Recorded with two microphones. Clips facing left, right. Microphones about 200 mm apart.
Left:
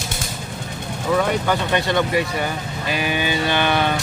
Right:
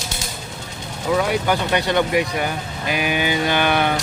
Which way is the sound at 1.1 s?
10° right (ahead or behind).